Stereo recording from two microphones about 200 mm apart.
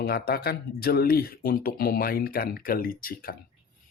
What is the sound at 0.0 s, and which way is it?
Speech, 50° left (ahead or behind).